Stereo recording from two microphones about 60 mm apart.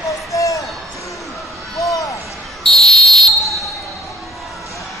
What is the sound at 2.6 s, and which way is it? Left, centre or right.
Fire alarm, centre.